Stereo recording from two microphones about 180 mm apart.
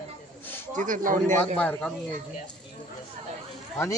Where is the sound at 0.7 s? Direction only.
45° right (ahead or behind).